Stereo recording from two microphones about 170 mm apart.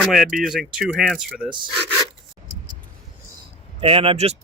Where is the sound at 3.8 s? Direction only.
35° right (ahead or behind).